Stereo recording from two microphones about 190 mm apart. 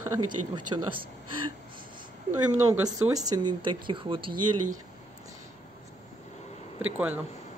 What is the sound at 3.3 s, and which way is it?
Speech, 20° right (ahead or behind).